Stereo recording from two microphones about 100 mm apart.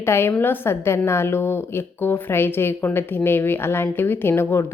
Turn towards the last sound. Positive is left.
turn(degrees=20)  # may be behind; listen again after turning